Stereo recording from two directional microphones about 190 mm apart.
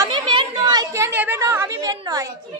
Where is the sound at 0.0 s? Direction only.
25° right (ahead or behind).